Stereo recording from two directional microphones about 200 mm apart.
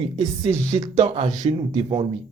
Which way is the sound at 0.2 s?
15° right (ahead or behind).